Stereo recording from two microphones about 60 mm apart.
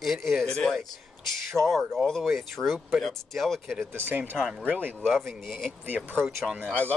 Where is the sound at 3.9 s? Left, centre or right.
Right.